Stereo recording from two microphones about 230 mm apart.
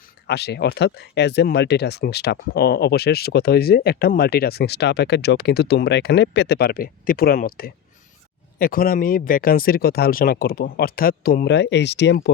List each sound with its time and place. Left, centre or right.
0.3 s speech: left